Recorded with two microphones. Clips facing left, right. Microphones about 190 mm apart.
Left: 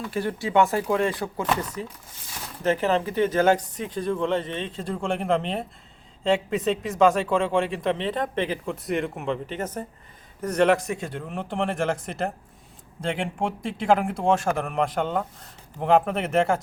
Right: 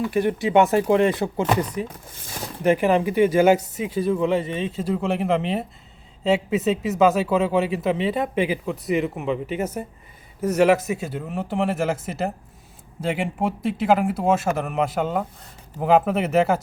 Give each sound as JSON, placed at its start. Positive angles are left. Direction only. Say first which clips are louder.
{"t": 0.0, "sound": "speech", "louder": "right 6 dB", "side_deg": -20}